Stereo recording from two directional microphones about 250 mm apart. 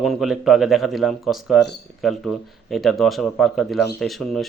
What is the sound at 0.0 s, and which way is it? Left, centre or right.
Speech, centre.